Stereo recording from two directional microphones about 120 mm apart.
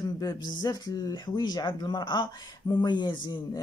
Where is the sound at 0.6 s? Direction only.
35° left (ahead or behind).